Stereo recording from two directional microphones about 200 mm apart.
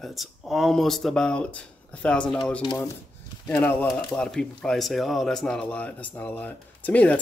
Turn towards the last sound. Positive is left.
turn(degrees=5)  # may be behind; listen again after turning